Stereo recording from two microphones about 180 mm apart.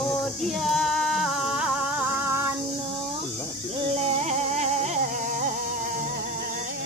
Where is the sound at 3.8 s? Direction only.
35° right (ahead or behind).